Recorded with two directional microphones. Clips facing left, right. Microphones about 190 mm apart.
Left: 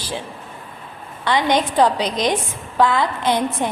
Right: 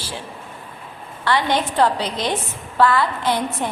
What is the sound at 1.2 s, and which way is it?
A woman's voice, 20° left (ahead or behind).